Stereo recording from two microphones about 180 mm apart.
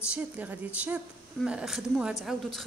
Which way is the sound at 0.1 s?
10° right (ahead or behind).